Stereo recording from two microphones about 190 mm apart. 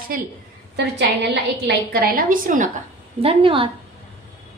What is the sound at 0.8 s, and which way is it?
A woman's voice, 65° right (ahead or behind).